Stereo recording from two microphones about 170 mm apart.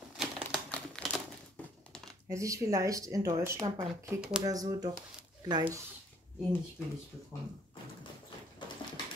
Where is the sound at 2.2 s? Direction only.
20° right (ahead or behind).